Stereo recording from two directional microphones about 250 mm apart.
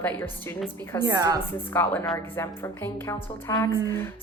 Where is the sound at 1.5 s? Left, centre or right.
Centre.